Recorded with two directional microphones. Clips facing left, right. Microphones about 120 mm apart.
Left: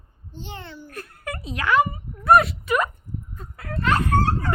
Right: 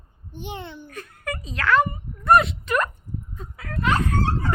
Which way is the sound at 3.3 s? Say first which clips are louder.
Left 1 dB; 5° left (ahead or behind).